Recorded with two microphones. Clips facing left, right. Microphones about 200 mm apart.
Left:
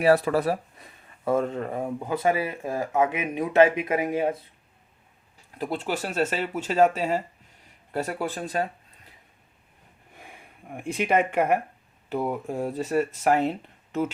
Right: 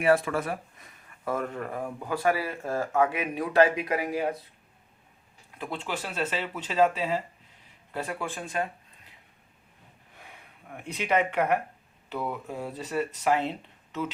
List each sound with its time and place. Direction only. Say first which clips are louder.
0.0 s speech: left 4 dB; 35° left (ahead or behind)
5.5 s speech: left 5 dB; 40° left (ahead or behind)
10.8 s speech: left 3 dB; 50° left (ahead or behind)